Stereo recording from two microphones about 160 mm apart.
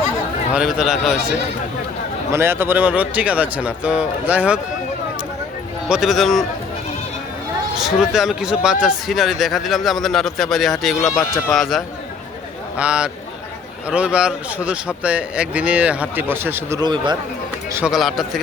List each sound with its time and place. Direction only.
0.5 s speech: 5° right (ahead or behind)
2.3 s speech: 15° right (ahead or behind)
5.9 s speech: centre (ahead or behind)
7.8 s speech: 5° right (ahead or behind)
11.1 s speech: 20° left (ahead or behind)
11.5 s speech: centre (ahead or behind); by 17.2 s 30° right (ahead or behind)
17.7 s speech: 5° right (ahead or behind)